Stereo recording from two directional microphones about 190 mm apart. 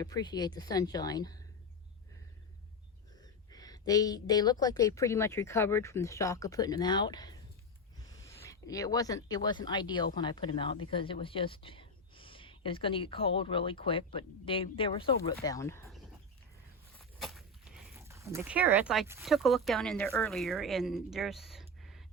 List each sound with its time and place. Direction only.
0.0 s speech: 20° left (ahead or behind)
3.2 s speech: 20° left (ahead or behind)
15.5 s speech: 15° left (ahead or behind)
17.0 s a sound: centre (ahead or behind)
17.9 s speech: 15° right (ahead or behind); by 22.0 s centre (ahead or behind)